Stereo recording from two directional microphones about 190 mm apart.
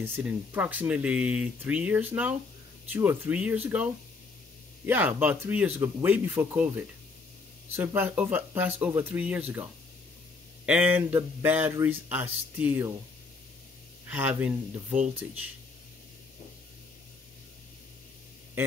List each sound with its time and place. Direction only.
0.0 s speech: 10° right (ahead or behind)
14.0 s speech: 10° right (ahead or behind)